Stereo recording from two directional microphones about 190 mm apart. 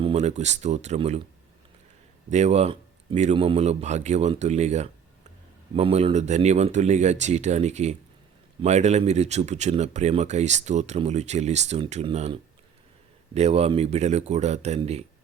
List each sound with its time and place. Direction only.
0.0 s speech: 35° right (ahead or behind)
2.3 s speech: 35° right (ahead or behind)